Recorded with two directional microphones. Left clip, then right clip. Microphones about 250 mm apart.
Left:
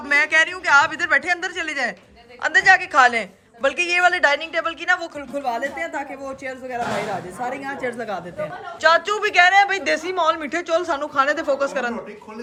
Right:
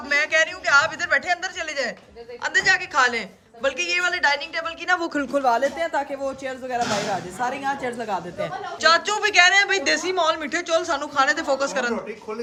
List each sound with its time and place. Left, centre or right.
0.1 s a man's voice: centre
5.4 s speech: centre
5.8 s a man's voice: centre